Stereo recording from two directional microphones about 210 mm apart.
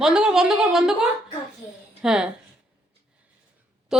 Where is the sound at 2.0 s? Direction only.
5° right (ahead or behind).